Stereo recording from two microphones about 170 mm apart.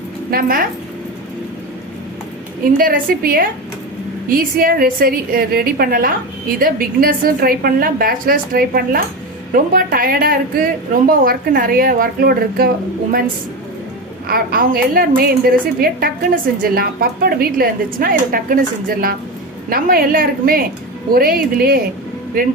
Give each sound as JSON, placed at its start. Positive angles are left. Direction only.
{"t": 0.3, "sound": "a woman's voice", "side_deg": -60}
{"t": 2.7, "sound": "a woman's voice", "side_deg": -55}
{"t": 14.3, "sound": "a woman's voice", "side_deg": -60}